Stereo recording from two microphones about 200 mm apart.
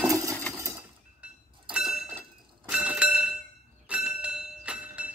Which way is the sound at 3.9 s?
5° right (ahead or behind).